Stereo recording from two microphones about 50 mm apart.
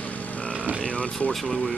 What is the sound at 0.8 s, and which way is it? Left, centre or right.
Speech, left.